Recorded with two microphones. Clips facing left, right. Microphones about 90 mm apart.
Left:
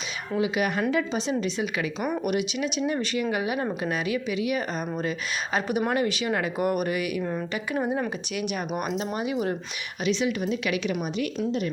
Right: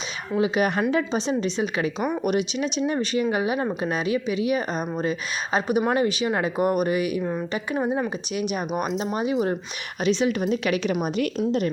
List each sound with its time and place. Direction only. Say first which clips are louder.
0.3 s a woman's voice: right 3 dB; 35° right (ahead or behind)
7.2 s a woman's voice: right 2 dB; 10° right (ahead or behind)
7.5 s a woman's voice: right 2 dB; 20° right (ahead or behind); by 11.7 s 45° right (ahead or behind)